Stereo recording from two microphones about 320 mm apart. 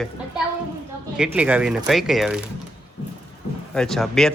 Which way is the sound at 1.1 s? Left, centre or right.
Centre.